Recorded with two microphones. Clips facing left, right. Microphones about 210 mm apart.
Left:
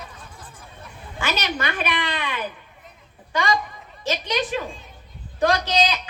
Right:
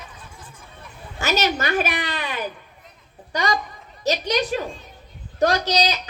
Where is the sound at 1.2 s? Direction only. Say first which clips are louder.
Right 4 dB; 40° right (ahead or behind).